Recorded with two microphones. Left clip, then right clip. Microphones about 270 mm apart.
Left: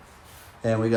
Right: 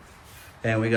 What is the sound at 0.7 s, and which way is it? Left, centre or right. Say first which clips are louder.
Speech: left 1 dB; centre.